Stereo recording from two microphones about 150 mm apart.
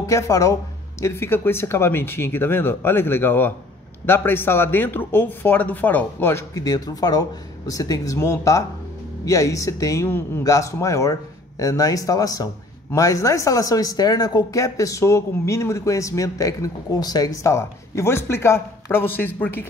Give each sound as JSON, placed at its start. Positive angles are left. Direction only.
{"t": 0.0, "sound": "speech", "side_deg": 20}